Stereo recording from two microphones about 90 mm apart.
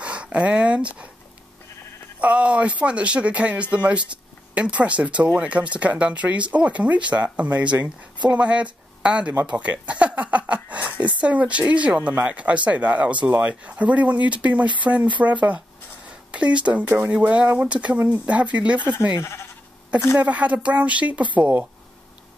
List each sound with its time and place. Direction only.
0.0 s speech: 15° right (ahead or behind)
2.1 s speech: 15° right (ahead or behind)
16.3 s speech: 15° right (ahead or behind)
20.2 s speech: 15° right (ahead or behind)